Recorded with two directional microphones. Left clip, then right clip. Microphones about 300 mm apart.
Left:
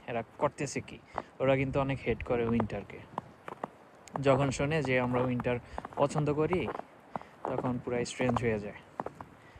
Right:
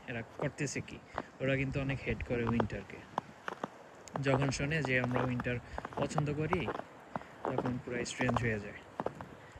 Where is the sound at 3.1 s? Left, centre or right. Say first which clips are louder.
Right 3 dB; centre.